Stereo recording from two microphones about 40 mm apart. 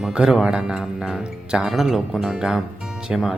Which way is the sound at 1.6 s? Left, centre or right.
Centre.